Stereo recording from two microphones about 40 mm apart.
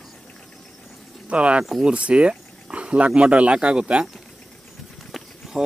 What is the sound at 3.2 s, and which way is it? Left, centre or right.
Speech, right.